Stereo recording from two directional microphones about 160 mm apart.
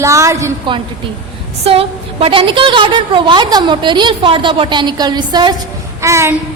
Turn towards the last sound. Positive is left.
turn(degrees=-15)  # may be behind; listen again after turning